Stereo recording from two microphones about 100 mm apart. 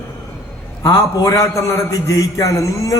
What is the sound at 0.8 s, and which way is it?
A man's voice, 35° left (ahead or behind).